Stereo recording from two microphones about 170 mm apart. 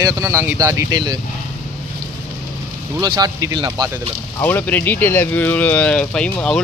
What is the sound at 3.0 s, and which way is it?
Speech, 25° right (ahead or behind).